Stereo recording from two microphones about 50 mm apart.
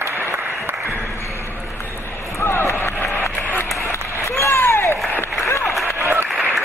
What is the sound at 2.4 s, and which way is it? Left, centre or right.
Run, left.